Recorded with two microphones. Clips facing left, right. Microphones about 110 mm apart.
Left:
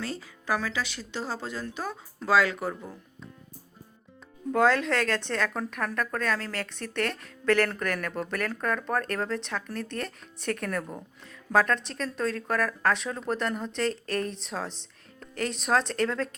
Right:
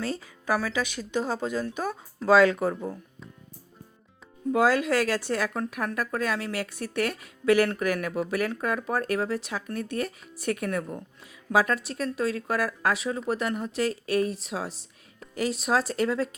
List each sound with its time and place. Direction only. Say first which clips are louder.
0.2 s speech: right 2 dB; 15° right (ahead or behind)
4.5 s speech: right 1 dB; 5° right (ahead or behind)